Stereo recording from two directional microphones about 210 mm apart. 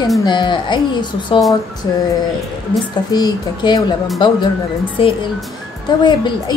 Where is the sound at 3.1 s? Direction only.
20° left (ahead or behind).